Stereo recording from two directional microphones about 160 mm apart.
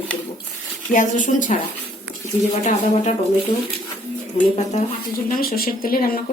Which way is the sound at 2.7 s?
45° left (ahead or behind).